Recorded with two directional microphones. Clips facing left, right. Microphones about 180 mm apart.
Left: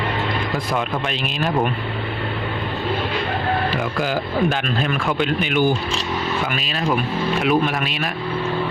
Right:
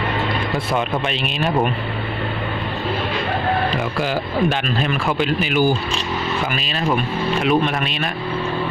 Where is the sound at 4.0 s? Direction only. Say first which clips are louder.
Even; centre (ahead or behind).